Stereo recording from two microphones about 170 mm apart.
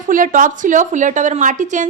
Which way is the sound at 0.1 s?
50° right (ahead or behind).